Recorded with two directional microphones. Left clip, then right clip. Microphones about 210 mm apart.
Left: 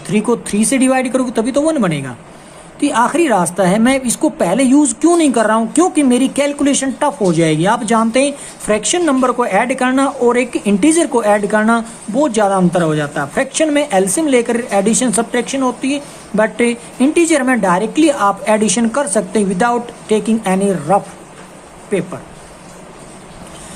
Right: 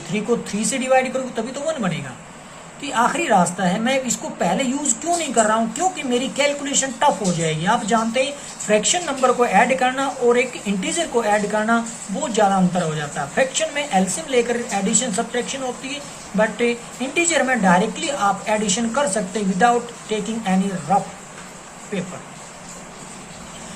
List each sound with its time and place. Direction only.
0.1 s a woman's voice: 60° left (ahead or behind)